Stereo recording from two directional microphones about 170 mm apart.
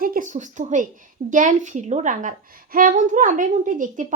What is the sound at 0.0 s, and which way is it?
A woman's voice, 55° right (ahead or behind).